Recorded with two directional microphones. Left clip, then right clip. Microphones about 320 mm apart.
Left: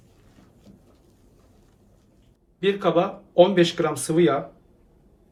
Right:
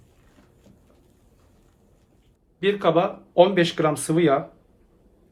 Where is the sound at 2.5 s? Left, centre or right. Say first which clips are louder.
Right 1 dB; right.